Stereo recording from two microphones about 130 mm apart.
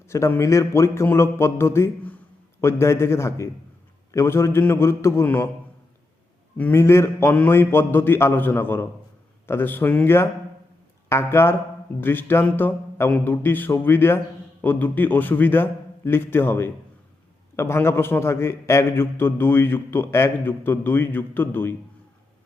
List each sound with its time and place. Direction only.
0.1 s a man's voice: 20° left (ahead or behind)
6.6 s a man's voice: 15° left (ahead or behind)